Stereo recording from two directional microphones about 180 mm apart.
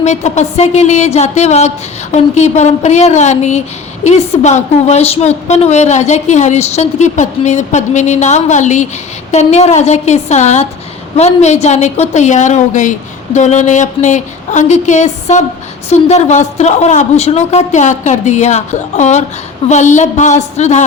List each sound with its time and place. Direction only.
0.0 s a woman's voice: 40° left (ahead or behind)